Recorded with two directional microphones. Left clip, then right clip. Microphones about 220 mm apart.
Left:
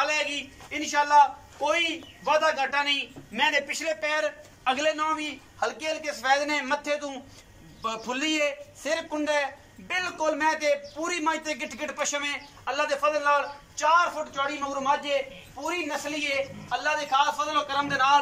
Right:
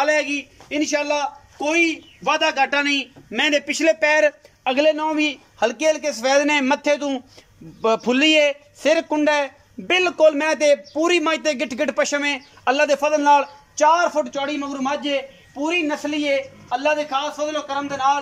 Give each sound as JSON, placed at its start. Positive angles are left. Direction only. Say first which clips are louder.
{"t": 0.0, "sound": "a man's voice", "louder": "right 7 dB", "side_deg": -50}